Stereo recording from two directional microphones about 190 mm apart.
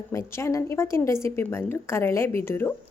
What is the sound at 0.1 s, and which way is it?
A woman's voice, 15° left (ahead or behind).